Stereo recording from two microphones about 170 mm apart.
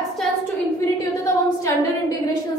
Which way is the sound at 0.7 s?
20° left (ahead or behind).